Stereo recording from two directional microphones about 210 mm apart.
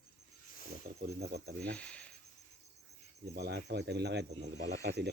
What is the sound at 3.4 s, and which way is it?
Speech, 50° right (ahead or behind).